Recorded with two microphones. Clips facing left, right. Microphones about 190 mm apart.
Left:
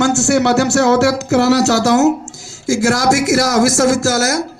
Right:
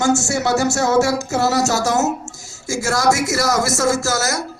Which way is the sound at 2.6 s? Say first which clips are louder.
Left 4 dB; 90° left.